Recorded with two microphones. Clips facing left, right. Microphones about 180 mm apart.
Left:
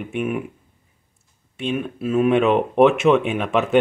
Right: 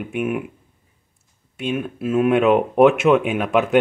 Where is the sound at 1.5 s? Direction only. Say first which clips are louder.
Even; 5° right (ahead or behind).